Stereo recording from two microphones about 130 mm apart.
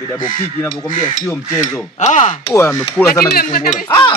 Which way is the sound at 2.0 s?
65° left (ahead or behind).